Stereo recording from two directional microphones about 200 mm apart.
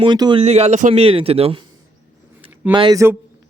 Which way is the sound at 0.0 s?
25° right (ahead or behind).